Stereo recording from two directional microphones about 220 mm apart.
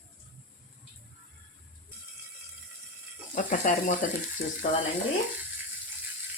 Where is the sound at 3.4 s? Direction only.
35° left (ahead or behind).